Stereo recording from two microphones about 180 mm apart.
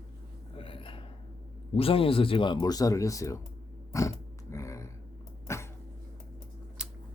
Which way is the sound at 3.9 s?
15° left (ahead or behind).